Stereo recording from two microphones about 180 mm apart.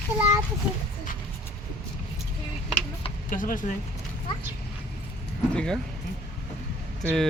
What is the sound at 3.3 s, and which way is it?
Speech, 50° left (ahead or behind).